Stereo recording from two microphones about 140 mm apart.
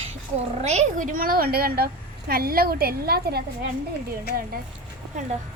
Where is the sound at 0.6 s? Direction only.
55° right (ahead or behind); by 3.3 s 90° right.